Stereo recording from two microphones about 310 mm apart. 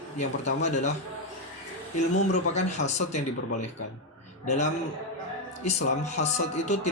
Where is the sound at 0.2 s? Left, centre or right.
Left.